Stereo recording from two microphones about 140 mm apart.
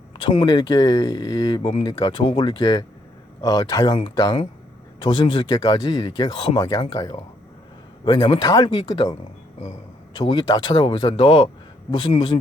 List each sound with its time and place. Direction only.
0.2 s speech: 35° left (ahead or behind)
10.2 s speech: 30° left (ahead or behind)